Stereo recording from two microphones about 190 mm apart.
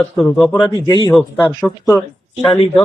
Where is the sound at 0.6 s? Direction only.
20° left (ahead or behind).